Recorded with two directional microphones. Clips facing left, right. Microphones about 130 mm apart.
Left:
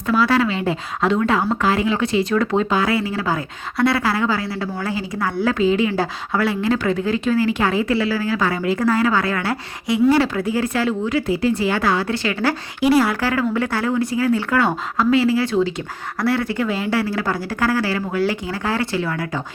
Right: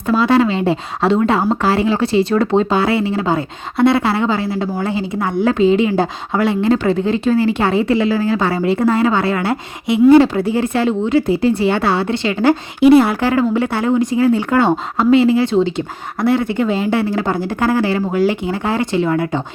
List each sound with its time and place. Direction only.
0.1 s a woman's voice: 25° right (ahead or behind)